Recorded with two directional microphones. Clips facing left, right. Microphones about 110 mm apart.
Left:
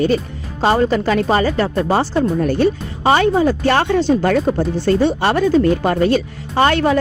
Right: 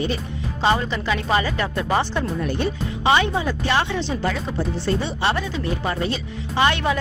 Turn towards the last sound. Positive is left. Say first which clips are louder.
# left 6 dB
turn(degrees=40)  # may be behind; listen again after turning